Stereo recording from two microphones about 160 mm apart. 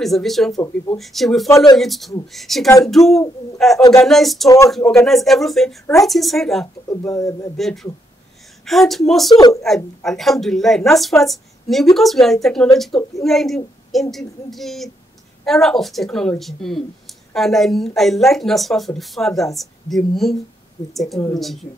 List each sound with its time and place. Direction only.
0.0 s speech: centre (ahead or behind)
7.2 s speech: 20° left (ahead or behind)
7.5 s speech: centre (ahead or behind)